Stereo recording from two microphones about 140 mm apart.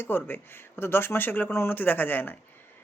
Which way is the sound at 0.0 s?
15° left (ahead or behind).